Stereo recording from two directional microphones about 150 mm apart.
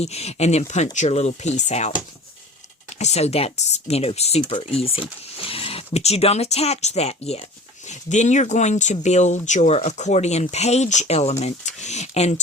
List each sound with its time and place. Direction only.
0.0 s speech: 45° left (ahead or behind)
3.0 s speech: 45° left (ahead or behind)